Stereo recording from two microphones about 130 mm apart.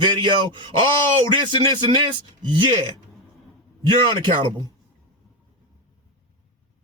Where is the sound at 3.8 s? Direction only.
35° right (ahead or behind).